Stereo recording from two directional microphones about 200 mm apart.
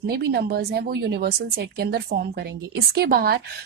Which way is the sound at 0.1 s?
50° right (ahead or behind).